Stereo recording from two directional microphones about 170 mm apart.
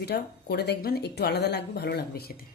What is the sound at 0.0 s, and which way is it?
Speech, 75° left (ahead or behind).